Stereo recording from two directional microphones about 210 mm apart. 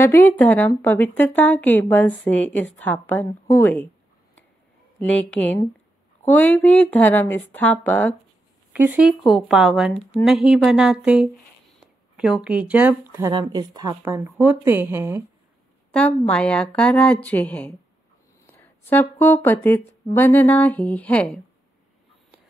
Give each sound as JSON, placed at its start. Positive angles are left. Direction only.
{"t": 0.0, "sound": "a woman's voice", "side_deg": 10}
{"t": 4.9, "sound": "a woman's voice", "side_deg": 5}
{"t": 8.7, "sound": "speech", "side_deg": -5}
{"t": 16.3, "sound": "a woman's voice", "side_deg": 5}